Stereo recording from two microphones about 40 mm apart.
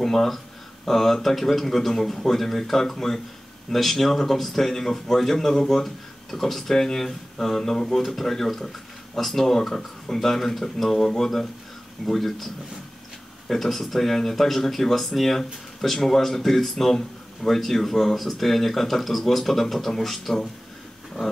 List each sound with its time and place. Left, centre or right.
0.0 s speech: centre
13.5 s speech: centre